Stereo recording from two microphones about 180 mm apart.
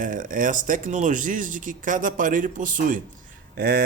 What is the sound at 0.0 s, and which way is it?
Speech, 50° right (ahead or behind).